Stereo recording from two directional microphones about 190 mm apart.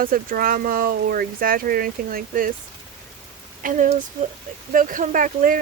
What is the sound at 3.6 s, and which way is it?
Speech, 40° right (ahead or behind).